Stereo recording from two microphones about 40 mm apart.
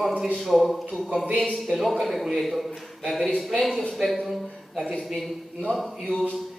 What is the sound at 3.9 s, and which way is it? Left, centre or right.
A man's voice, centre.